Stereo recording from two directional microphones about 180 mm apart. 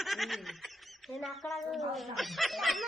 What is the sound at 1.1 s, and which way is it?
A woman's voice, centre (ahead or behind).